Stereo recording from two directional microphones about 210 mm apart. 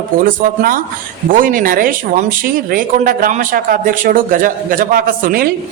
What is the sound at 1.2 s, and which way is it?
Speech, 40° right (ahead or behind).